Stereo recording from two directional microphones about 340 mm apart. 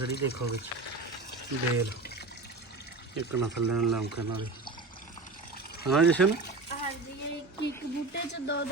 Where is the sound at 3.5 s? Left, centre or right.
Right.